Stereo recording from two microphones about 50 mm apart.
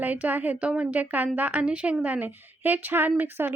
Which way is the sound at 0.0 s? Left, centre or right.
Right.